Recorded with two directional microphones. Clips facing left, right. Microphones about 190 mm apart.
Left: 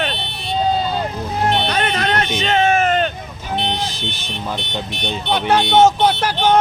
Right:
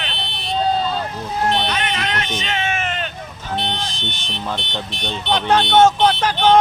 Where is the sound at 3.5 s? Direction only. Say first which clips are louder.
Left 3 dB; 5° left (ahead or behind).